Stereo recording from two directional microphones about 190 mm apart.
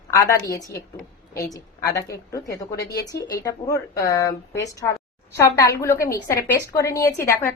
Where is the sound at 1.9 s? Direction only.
15° left (ahead or behind).